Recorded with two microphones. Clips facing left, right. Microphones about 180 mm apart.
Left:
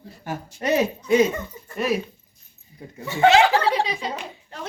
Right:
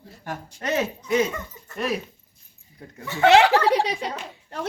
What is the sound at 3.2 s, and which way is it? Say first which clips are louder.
Speech: even; 65° right (ahead or behind).